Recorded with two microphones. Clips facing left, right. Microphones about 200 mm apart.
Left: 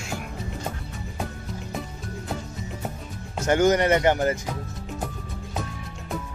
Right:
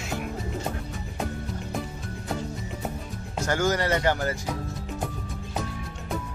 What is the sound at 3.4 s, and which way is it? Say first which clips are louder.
Speech: left 6 dB; 20° left (ahead or behind).